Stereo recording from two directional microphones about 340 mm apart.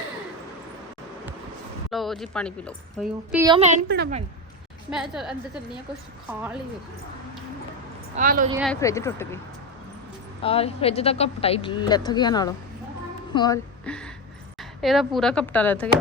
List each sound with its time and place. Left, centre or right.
1.9 s a woman's voice: centre
3.4 s a woman's voice: centre
4.9 s a woman's voice: centre
8.1 s a woman's voice: right
8.5 s speech: centre
10.4 s a woman's voice: centre